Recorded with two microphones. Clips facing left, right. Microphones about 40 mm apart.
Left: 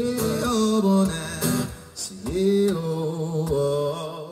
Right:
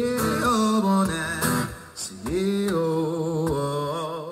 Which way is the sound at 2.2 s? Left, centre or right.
Right.